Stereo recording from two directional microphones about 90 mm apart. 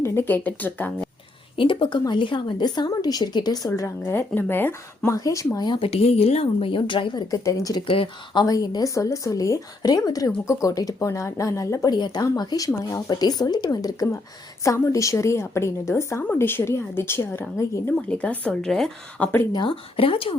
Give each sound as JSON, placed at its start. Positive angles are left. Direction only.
{"t": 0.0, "sound": "speech", "side_deg": 25}
{"t": 1.5, "sound": "a woman's voice", "side_deg": 70}
{"t": 4.1, "sound": "speech", "side_deg": 20}
{"t": 5.1, "sound": "a woman's voice", "side_deg": 40}
{"t": 5.6, "sound": "a woman's voice", "side_deg": 80}
{"t": 7.3, "sound": "a woman's voice", "side_deg": 35}
{"t": 7.8, "sound": "a woman's voice", "side_deg": 65}
{"t": 8.5, "sound": "a woman's voice", "side_deg": 45}
{"t": 11.9, "sound": "a woman's voice", "side_deg": 50}
{"t": 16.2, "sound": "speech", "side_deg": 20}
{"t": 17.9, "sound": "speech", "side_deg": 15}
{"t": 19.2, "sound": "speech", "side_deg": 20}
{"t": 19.5, "sound": "speech", "side_deg": 80}